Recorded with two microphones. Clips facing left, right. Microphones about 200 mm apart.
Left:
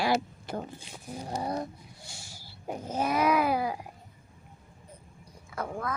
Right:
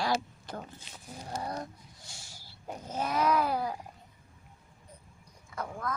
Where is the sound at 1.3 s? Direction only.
15° left (ahead or behind).